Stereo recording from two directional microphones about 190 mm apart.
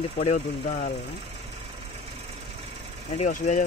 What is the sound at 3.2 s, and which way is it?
Speech, 40° left (ahead or behind).